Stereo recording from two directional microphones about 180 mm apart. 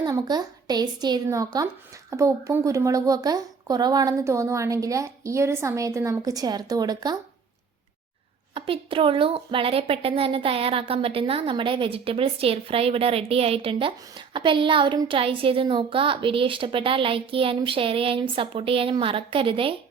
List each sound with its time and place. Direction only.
0.0 s a woman's voice: 20° right (ahead or behind)
8.5 s speech: 30° right (ahead or behind)